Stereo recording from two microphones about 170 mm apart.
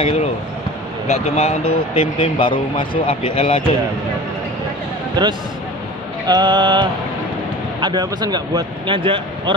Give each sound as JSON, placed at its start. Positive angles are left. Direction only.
{"t": 0.0, "sound": "speech", "side_deg": 35}
{"t": 5.2, "sound": "speech", "side_deg": -25}